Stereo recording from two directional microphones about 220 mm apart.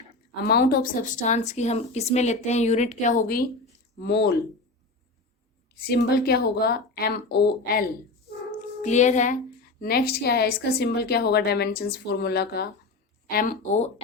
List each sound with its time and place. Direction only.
0.4 s speech: 45° left (ahead or behind)
3.9 s speech: 50° left (ahead or behind)
5.8 s a woman's voice: 45° left (ahead or behind)
8.8 s speech: 30° left (ahead or behind)
9.8 s a woman's voice: 45° left (ahead or behind)